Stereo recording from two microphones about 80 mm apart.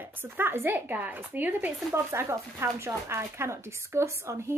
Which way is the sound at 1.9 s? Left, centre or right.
Right.